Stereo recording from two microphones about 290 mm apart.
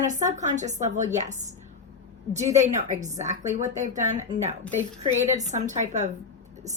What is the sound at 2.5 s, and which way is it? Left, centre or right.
A woman's voice, right.